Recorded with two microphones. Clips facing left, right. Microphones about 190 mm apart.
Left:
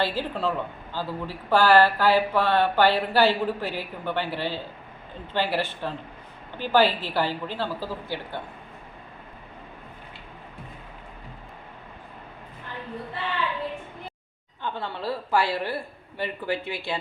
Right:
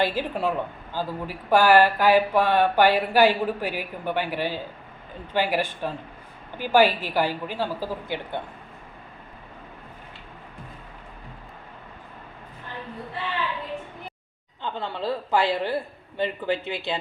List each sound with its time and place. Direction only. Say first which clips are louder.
0.0 s a woman's voice: right 2 dB; 15° right (ahead or behind)
14.6 s a man's voice: right 2 dB; 20° right (ahead or behind)